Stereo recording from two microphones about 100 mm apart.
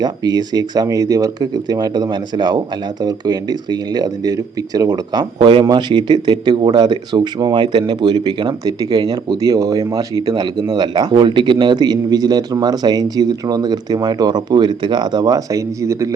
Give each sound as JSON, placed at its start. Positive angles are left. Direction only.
{"t": 0.0, "sound": "speech", "side_deg": -45}
{"t": 5.4, "sound": "speech", "side_deg": -60}
{"t": 5.6, "sound": "speech", "side_deg": -45}